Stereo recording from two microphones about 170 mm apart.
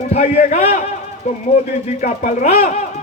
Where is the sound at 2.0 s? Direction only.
40° left (ahead or behind).